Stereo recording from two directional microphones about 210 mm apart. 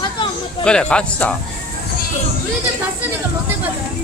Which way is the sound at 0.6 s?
5° left (ahead or behind).